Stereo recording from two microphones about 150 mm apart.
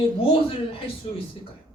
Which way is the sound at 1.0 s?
35° left (ahead or behind).